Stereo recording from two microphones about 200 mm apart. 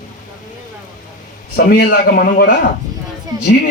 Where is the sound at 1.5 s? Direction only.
50° left (ahead or behind).